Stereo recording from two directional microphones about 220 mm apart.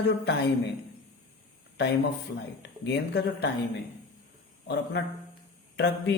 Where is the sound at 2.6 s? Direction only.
50° left (ahead or behind).